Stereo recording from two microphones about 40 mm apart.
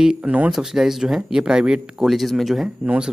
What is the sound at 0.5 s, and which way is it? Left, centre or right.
Speech, centre.